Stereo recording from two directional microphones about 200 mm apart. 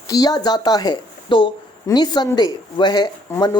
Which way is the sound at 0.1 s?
20° left (ahead or behind).